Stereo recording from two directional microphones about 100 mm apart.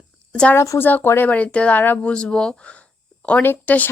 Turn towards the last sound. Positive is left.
turn(degrees=20)  # may be behind; listen again after turning